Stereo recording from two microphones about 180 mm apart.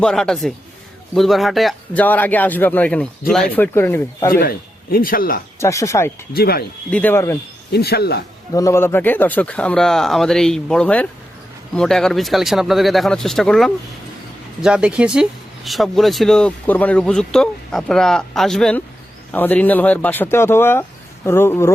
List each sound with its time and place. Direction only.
0.0 s speech: 5° left (ahead or behind)
4.3 s a man's voice: 55° left (ahead or behind)
5.5 s speech: 15° left (ahead or behind)
6.3 s speech: 60° left (ahead or behind)
6.9 s speech: 10° left (ahead or behind)
7.7 s speech: 60° left (ahead or behind)
8.5 s speech: 15° left (ahead or behind)